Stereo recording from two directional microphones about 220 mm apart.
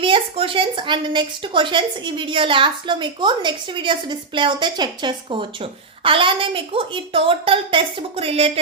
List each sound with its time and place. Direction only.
0.0 s a woman's voice: 25° right (ahead or behind)